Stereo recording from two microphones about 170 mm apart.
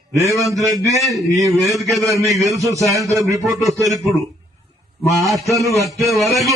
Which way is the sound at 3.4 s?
Centre (ahead or behind).